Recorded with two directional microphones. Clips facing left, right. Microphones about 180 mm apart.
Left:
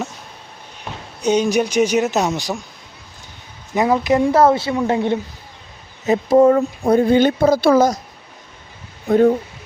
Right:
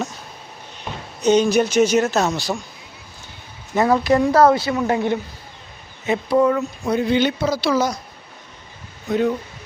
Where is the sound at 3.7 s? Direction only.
15° left (ahead or behind).